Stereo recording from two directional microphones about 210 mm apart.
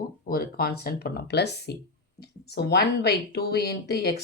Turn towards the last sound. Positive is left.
turn(degrees=50)  # may be behind; listen again after turning